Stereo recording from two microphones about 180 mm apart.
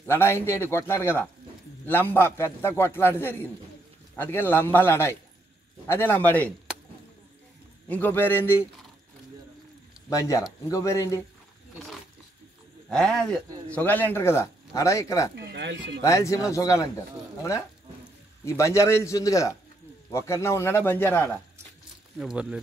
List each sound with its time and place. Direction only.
0.0 s speech: 15° left (ahead or behind)
7.9 s speech: 10° left (ahead or behind)
10.0 s speech: 15° left (ahead or behind)
12.9 s speech: 5° left (ahead or behind)
15.3 s speech: 70° right (ahead or behind)
16.0 s speech: 15° left (ahead or behind)
18.4 s speech: 15° left (ahead or behind)
22.2 s speech: 5° right (ahead or behind)